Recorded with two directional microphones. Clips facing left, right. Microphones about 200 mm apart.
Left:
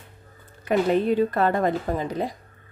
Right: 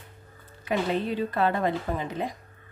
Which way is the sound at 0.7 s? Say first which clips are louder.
Left 6 dB; 50° left (ahead or behind).